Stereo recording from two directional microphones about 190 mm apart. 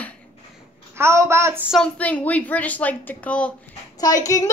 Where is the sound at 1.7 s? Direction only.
5° left (ahead or behind).